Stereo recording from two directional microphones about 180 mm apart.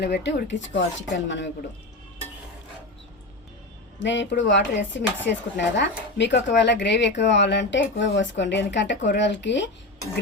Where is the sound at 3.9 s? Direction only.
85° left.